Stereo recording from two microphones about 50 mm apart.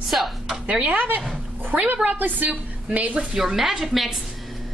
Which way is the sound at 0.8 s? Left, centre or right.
Right.